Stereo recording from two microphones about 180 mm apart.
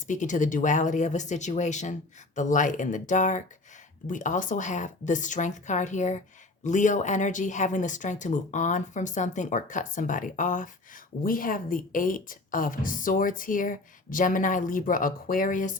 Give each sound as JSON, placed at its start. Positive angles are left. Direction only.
{"t": 0.1, "sound": "speech", "side_deg": 45}